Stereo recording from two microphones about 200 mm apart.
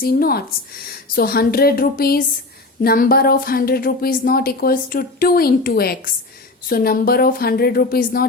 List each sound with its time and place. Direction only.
0.0 s a woman's voice: 50° left (ahead or behind)